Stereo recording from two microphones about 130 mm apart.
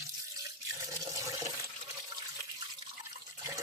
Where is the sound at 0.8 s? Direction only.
25° right (ahead or behind).